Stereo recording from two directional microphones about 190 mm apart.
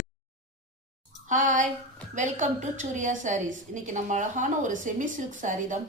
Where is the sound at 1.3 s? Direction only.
40° right (ahead or behind).